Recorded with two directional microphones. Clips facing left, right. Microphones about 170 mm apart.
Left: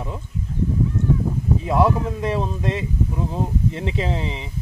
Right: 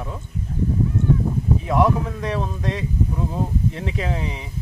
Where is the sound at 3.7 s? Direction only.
25° left (ahead or behind).